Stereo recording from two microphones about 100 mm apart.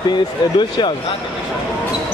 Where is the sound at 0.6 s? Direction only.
50° left (ahead or behind).